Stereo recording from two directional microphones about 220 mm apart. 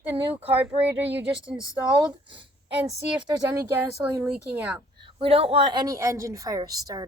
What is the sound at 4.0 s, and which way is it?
Speech, 5° right (ahead or behind).